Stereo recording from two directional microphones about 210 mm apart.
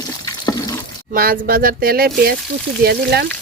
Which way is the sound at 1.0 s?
45° right (ahead or behind).